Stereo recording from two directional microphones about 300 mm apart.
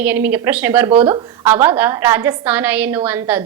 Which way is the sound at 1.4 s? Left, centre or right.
Centre.